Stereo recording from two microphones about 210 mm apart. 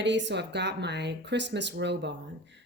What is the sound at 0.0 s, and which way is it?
Speech, 60° right (ahead or behind).